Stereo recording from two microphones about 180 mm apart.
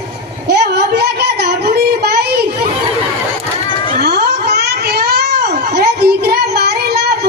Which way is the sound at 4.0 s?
65° right (ahead or behind).